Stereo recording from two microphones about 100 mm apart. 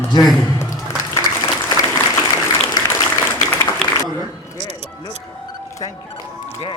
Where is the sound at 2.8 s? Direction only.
45° left (ahead or behind).